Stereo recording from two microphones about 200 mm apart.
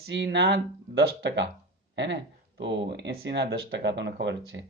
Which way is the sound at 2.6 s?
60° right (ahead or behind).